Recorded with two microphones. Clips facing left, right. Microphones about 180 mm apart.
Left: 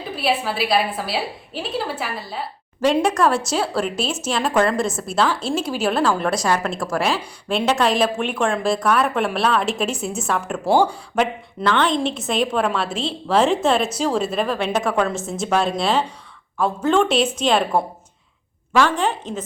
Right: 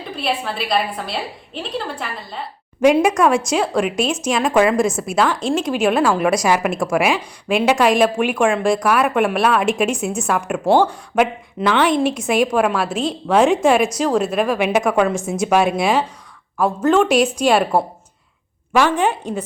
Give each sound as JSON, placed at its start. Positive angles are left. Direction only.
{"t": 0.2, "sound": "a woman's voice", "side_deg": 5}
{"t": 6.7, "sound": "a woman's voice", "side_deg": 0}
{"t": 8.6, "sound": "a woman's voice", "side_deg": 0}
{"t": 10.7, "sound": "speech", "side_deg": 10}
{"t": 11.2, "sound": "a woman's voice", "side_deg": -10}